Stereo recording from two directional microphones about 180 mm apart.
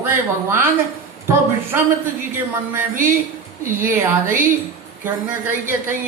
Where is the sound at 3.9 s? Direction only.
15° right (ahead or behind).